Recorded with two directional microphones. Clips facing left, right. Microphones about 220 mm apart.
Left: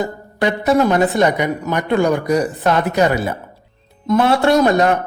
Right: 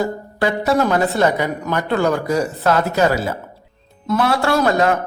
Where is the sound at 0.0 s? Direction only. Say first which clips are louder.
Even; 20° left (ahead or behind).